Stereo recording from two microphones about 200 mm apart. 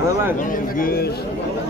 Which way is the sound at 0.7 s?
45° left (ahead or behind).